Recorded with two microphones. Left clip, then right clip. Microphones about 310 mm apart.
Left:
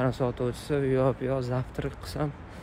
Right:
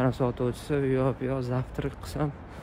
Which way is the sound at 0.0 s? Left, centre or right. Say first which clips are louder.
Right 1 dB; centre.